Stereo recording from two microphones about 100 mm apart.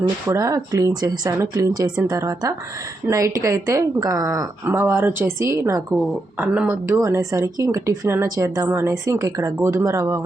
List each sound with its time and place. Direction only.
0.3 s speech: 35° right (ahead or behind)
4.6 s speech: 25° right (ahead or behind)
6.3 s speech: 15° right (ahead or behind)